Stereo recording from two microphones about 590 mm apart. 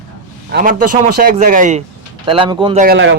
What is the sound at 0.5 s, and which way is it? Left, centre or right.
Speech, centre.